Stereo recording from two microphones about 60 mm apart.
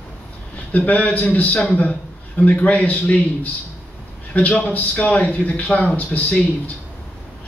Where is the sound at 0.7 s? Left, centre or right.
Left.